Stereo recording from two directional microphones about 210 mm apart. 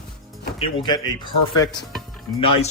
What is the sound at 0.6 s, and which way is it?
Speech, 25° left (ahead or behind).